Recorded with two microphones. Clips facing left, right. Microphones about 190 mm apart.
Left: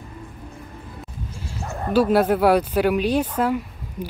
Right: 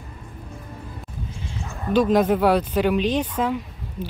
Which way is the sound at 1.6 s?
45° left (ahead or behind).